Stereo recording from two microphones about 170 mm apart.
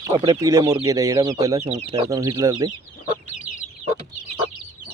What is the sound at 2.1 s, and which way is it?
Speech, 20° right (ahead or behind).